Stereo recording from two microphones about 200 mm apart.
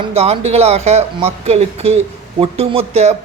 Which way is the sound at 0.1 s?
30° right (ahead or behind).